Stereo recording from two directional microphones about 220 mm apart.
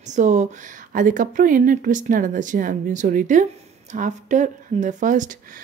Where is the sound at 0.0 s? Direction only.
35° right (ahead or behind).